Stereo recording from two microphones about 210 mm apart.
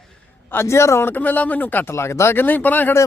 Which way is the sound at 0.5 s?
10° left (ahead or behind).